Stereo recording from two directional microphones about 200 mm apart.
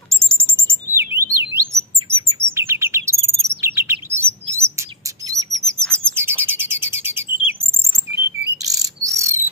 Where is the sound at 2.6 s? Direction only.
15° right (ahead or behind).